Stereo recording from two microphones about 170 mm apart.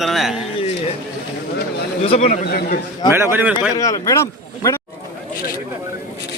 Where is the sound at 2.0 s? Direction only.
35° left (ahead or behind).